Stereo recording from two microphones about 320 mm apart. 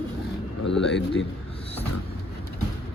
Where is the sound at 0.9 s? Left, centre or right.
Left.